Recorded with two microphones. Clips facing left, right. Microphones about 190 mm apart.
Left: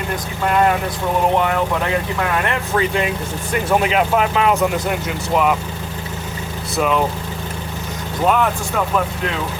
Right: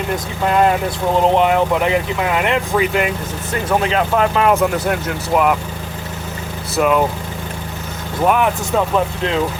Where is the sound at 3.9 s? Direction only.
5° left (ahead or behind).